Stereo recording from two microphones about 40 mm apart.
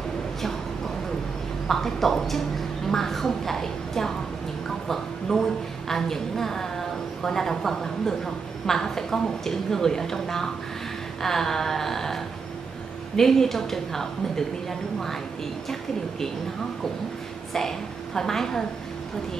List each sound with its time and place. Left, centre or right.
1.7 s a woman's voice: centre
17.5 s a woman's voice: centre